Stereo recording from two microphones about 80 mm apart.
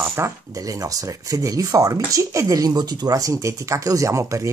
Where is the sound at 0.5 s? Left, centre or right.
Right.